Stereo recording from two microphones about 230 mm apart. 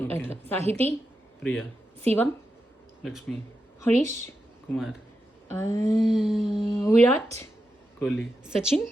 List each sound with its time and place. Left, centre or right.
0.0 s a woman's voice: centre
0.6 s a woman's voice: right
1.4 s a woman's voice: centre
3.0 s a man's voice: centre
3.8 s a woman's voice: centre
4.7 s a sound: centre
5.5 s a woman's voice: centre
6.0 s a sound: centre
6.7 s a woman's voice: centre
7.9 s speech: centre
8.4 s a sound: centre